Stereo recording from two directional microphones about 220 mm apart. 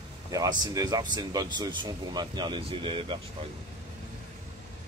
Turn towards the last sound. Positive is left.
turn(degrees=-25)  # may be behind; listen again after turning